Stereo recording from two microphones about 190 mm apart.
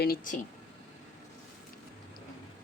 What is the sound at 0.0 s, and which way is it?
Speech, 50° left (ahead or behind).